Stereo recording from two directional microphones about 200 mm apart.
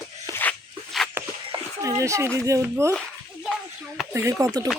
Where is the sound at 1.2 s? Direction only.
10° right (ahead or behind).